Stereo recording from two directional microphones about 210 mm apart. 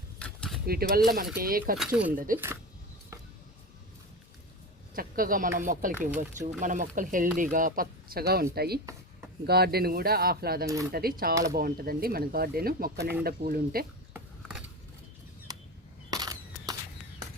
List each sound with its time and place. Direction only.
0.2 s a sound: 5° left (ahead or behind)
0.7 s speech: 45° right (ahead or behind)
1.9 s speech: 5° right (ahead or behind)
2.1 s speech: 40° right (ahead or behind)
4.9 s speech: 45° right (ahead or behind)
10.7 s speech: 15° right (ahead or behind)
10.9 s speech: 45° right (ahead or behind)
16.0 s single-lens reflex camera: 15° right (ahead or behind)